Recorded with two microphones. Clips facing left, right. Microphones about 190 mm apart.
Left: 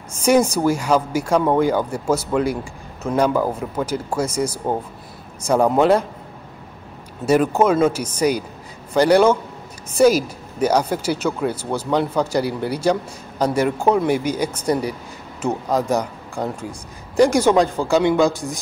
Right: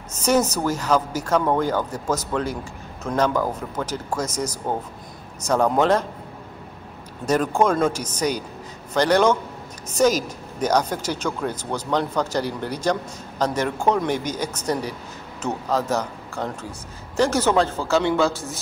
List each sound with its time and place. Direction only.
0.1 s speech: 10° left (ahead or behind)
7.2 s speech: 10° left (ahead or behind)